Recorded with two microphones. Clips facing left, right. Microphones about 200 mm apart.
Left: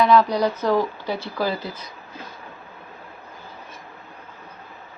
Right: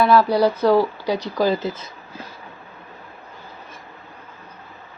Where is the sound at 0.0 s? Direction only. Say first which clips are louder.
Right 2 dB; 5° right (ahead or behind); by 1.9 s 25° right (ahead or behind).